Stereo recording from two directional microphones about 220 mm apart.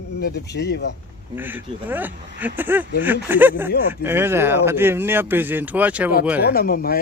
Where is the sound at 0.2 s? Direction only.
50° left (ahead or behind).